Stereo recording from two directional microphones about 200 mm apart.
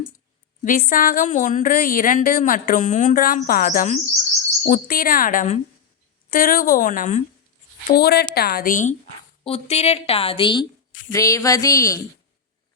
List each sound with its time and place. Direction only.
0.6 s speech: 45° left (ahead or behind)
7.9 s a woman's voice: 50° left (ahead or behind); by 12.0 s 15° left (ahead or behind)